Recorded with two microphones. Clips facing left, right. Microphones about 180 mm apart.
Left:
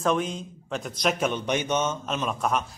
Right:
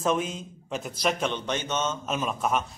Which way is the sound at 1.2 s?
10° left (ahead or behind).